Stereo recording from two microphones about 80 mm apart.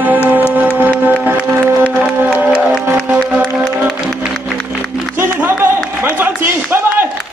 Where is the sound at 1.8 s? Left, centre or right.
Centre.